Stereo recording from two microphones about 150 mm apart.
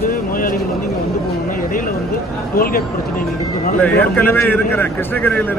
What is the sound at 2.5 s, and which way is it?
Speech, 75° left (ahead or behind).